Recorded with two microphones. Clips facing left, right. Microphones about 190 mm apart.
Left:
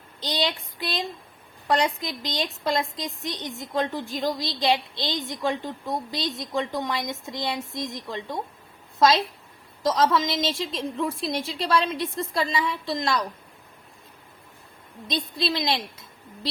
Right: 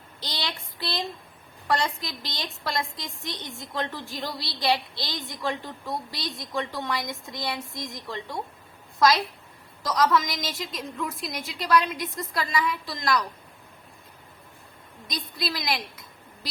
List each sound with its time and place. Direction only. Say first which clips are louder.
0.2 s a woman's voice: left 7 dB; 20° left (ahead or behind)
15.0 s a woman's voice: left 5 dB; 25° left (ahead or behind)